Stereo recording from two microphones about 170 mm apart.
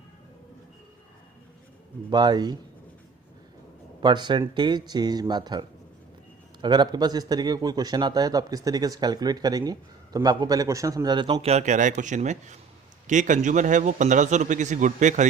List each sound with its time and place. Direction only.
2.0 s speech: 25° right (ahead or behind)
4.0 s a man's voice: 25° right (ahead or behind); by 15.3 s 45° right (ahead or behind)